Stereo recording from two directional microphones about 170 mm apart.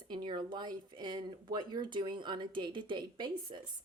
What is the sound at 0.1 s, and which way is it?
Speech, 25° right (ahead or behind).